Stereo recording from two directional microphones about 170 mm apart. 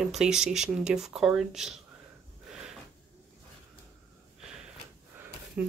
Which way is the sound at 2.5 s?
5° right (ahead or behind).